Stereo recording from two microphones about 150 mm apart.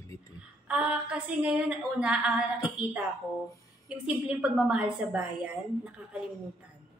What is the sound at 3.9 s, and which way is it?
A woman's voice, 5° right (ahead or behind).